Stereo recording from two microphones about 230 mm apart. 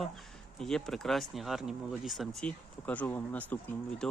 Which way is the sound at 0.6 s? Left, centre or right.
Centre.